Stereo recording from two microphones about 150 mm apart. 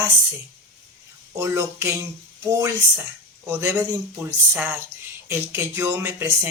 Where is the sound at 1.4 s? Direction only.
15° right (ahead or behind).